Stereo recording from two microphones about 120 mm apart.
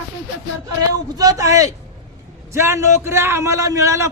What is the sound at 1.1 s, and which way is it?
Speech, 30° right (ahead or behind).